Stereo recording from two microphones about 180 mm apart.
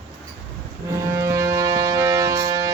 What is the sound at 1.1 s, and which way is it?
Music, 15° right (ahead or behind).